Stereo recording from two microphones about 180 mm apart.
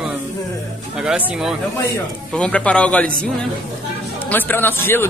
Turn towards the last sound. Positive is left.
turn(degrees=10)  # may be behind; listen again after turning